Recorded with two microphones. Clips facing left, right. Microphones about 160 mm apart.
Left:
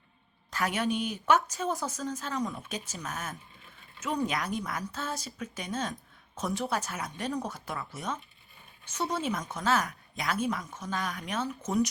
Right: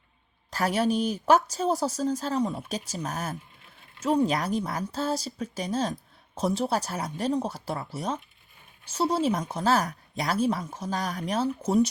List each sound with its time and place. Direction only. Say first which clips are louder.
0.5 s speech: right 5 dB; 35° right (ahead or behind)